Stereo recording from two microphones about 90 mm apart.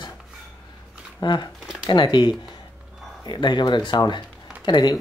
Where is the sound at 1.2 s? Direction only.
55° left (ahead or behind).